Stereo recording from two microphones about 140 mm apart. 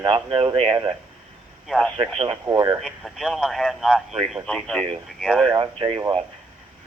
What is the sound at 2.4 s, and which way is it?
Speech, 25° right (ahead or behind).